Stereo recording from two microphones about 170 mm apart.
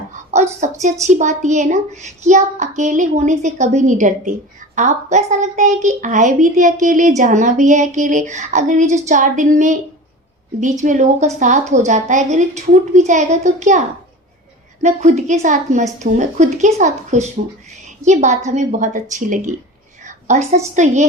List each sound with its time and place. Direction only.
0.6 s a child's voice: 45° right (ahead or behind)
20.1 s a sound: 45° right (ahead or behind)
20.7 s a child's voice: 45° right (ahead or behind)